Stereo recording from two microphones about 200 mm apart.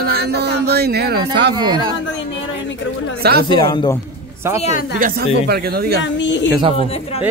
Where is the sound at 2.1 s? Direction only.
65° left (ahead or behind).